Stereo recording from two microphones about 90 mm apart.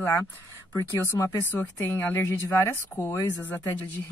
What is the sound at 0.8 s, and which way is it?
Speech, 30° left (ahead or behind).